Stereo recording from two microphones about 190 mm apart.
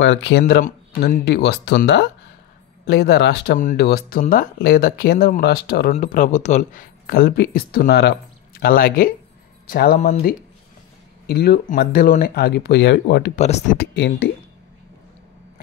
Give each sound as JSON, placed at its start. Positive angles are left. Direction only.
{"t": 0.0, "sound": "speech", "side_deg": 70}
{"t": 1.2, "sound": "speech", "side_deg": 60}
{"t": 5.9, "sound": "speech", "side_deg": 45}
{"t": 11.2, "sound": "speech", "side_deg": 55}
{"t": 13.4, "sound": "speech", "side_deg": 35}
{"t": 13.7, "sound": "speech", "side_deg": 60}